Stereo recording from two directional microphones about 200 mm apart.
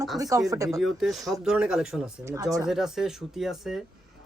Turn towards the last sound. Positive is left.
turn(degrees=0)  # may be behind; listen again after turning